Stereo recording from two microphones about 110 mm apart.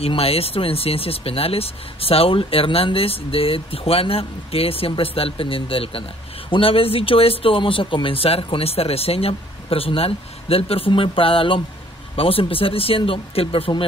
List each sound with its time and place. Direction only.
0.0 s speech: 60° left (ahead or behind)